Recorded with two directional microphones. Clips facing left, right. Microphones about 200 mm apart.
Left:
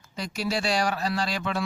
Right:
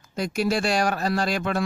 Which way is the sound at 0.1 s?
50° right (ahead or behind).